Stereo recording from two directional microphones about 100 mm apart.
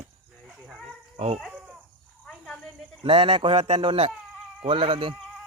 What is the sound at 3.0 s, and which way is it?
Speech, 65° right (ahead or behind).